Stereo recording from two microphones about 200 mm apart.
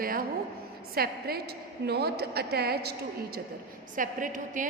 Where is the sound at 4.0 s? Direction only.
40° right (ahead or behind).